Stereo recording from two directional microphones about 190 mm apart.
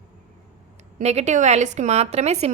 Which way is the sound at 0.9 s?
35° right (ahead or behind).